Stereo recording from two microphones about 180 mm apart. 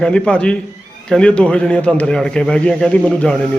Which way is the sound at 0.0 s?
5° left (ahead or behind).